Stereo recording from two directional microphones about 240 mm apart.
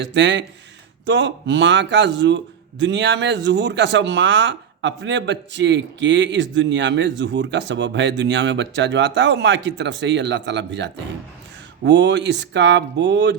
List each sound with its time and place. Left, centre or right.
0.0 s a man's voice: right